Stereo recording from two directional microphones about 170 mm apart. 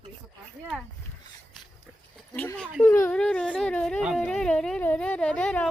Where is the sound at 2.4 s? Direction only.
10° left (ahead or behind).